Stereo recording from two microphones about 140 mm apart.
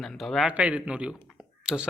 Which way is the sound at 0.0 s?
5° left (ahead or behind).